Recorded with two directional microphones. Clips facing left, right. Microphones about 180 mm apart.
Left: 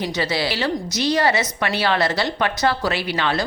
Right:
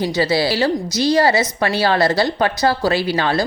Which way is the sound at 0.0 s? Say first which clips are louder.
Right 5 dB; 30° right (ahead or behind).